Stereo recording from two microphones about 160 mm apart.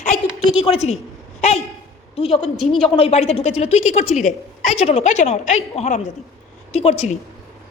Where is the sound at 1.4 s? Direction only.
40° left (ahead or behind).